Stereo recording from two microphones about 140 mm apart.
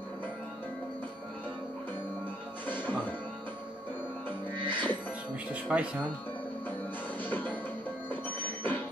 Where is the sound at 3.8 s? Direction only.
15° left (ahead or behind).